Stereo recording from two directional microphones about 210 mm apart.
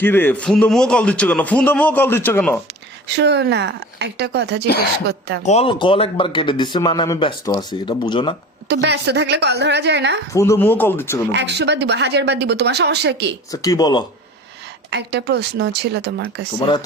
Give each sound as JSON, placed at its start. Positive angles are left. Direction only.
{"t": 0.0, "sound": "a man's voice", "side_deg": 10}
{"t": 3.2, "sound": "speech", "side_deg": -55}
{"t": 5.5, "sound": "speech", "side_deg": 25}
{"t": 8.6, "sound": "speech", "side_deg": -55}
{"t": 10.3, "sound": "a man's voice", "side_deg": 15}
{"t": 11.3, "sound": "speech", "side_deg": -55}
{"t": 13.5, "sound": "a man's voice", "side_deg": 15}
{"t": 14.8, "sound": "speech", "side_deg": -55}
{"t": 16.6, "sound": "speech", "side_deg": 20}